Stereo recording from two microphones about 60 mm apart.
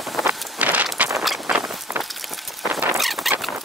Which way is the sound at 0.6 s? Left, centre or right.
Right.